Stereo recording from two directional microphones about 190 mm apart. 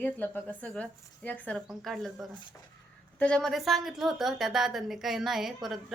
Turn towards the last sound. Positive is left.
turn(degrees=0)  # may be behind; listen again after turning